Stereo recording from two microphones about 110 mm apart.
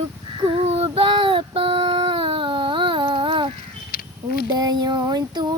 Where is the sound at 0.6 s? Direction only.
65° right (ahead or behind); by 3.5 s 50° right (ahead or behind).